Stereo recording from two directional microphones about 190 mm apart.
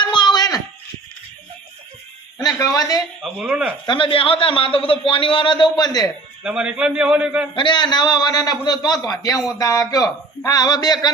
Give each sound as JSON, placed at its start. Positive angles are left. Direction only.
{"t": 0.0, "sound": "a sound", "side_deg": 25}
{"t": 2.4, "sound": "a man's voice", "side_deg": 20}
{"t": 3.3, "sound": "speech", "side_deg": -5}
{"t": 3.8, "sound": "a man's voice", "side_deg": 25}
{"t": 6.4, "sound": "a man's voice", "side_deg": -5}
{"t": 7.5, "sound": "a man's voice", "side_deg": 25}